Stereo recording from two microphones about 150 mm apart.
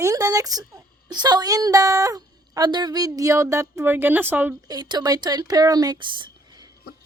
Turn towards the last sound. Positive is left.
turn(degrees=-30)  # may be behind; listen again after turning